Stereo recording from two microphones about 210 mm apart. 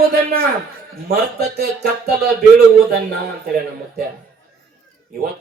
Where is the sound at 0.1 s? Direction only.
45° right (ahead or behind).